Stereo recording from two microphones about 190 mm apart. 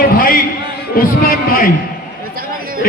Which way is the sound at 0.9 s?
50° left (ahead or behind).